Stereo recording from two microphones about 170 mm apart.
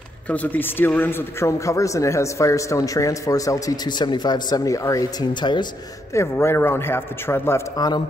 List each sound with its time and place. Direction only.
0.3 s speech: 10° left (ahead or behind); by 5.7 s 25° left (ahead or behind)
6.1 s a man's voice: 15° left (ahead or behind)